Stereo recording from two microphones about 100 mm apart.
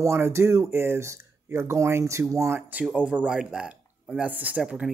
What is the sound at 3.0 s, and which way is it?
Speech, 10° right (ahead or behind).